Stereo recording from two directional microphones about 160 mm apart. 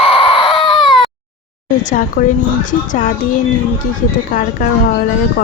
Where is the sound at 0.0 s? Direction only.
35° left (ahead or behind).